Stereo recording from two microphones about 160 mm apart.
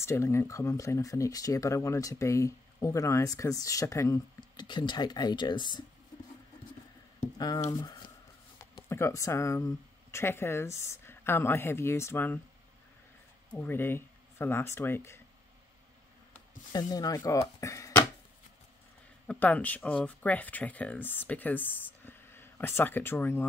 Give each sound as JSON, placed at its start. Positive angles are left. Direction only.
{"t": 0.0, "sound": "speech", "side_deg": 15}
{"t": 7.3, "sound": "speech", "side_deg": 20}
{"t": 8.5, "sound": "speech", "side_deg": 15}
{"t": 13.5, "sound": "speech", "side_deg": 15}
{"t": 16.7, "sound": "speech", "side_deg": 25}
{"t": 19.2, "sound": "speech", "side_deg": 10}